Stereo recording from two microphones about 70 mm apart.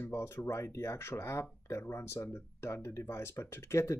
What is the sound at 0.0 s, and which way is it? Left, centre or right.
Speech, left.